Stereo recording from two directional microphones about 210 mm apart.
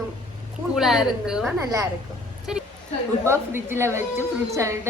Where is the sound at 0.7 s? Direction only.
Centre (ahead or behind).